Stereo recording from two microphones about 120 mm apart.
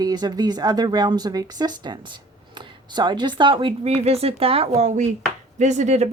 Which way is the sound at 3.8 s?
60° right (ahead or behind).